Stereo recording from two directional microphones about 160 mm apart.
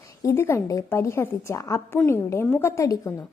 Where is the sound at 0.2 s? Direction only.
15° left (ahead or behind).